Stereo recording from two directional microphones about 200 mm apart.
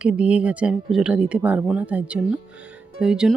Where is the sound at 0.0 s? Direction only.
5° right (ahead or behind).